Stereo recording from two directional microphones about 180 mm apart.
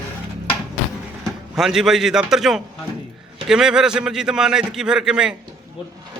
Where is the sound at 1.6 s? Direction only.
Centre (ahead or behind).